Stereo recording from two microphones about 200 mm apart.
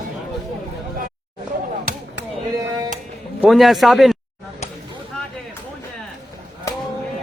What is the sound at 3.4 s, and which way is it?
Speech, centre (ahead or behind).